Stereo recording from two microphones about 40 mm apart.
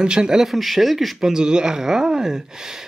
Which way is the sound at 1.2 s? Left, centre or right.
Centre.